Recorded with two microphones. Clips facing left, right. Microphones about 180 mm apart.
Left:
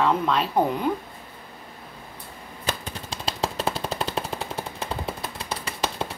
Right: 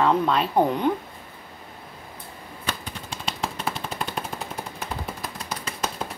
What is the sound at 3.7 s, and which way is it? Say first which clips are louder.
Machine gun: left 3 dB; 35° left (ahead or behind).